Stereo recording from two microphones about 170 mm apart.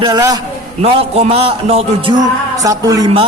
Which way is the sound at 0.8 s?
35° right (ahead or behind).